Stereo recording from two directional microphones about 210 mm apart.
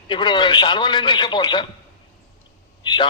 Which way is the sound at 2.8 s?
20° left (ahead or behind).